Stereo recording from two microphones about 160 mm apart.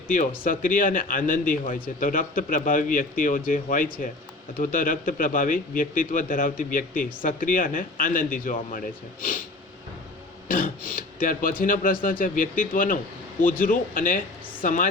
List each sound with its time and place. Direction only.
0.1 s speech: 60° left (ahead or behind)
10.5 s a woman's voice: 60° left (ahead or behind)